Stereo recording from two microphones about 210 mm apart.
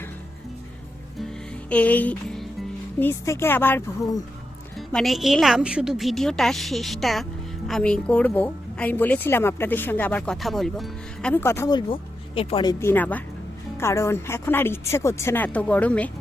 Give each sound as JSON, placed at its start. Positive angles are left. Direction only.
{"t": 1.7, "sound": "a woman's voice", "side_deg": 5}
{"t": 4.9, "sound": "a woman's voice", "side_deg": 0}
{"t": 11.9, "sound": "speech", "side_deg": 25}
{"t": 12.8, "sound": "a woman's voice", "side_deg": 10}